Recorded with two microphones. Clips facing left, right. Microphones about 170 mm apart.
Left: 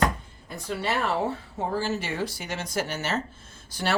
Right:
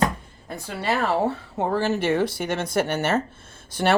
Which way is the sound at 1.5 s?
65° right (ahead or behind).